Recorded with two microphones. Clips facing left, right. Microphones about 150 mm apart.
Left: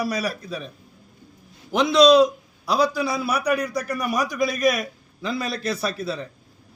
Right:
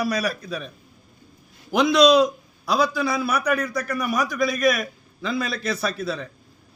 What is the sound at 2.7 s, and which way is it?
Speech, 35° left (ahead or behind).